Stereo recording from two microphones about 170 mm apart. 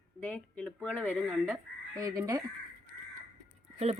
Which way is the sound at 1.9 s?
20° right (ahead or behind).